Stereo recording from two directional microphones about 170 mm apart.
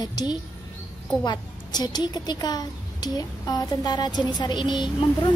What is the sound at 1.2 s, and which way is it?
Speech, 25° left (ahead or behind).